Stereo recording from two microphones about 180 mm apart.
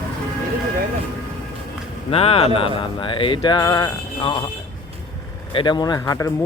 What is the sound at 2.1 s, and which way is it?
Speech, 35° left (ahead or behind).